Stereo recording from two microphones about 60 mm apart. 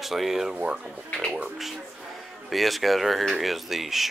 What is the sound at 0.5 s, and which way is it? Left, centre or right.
Speech, centre.